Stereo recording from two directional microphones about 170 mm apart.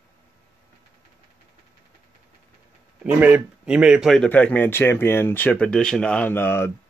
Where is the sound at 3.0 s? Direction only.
10° right (ahead or behind).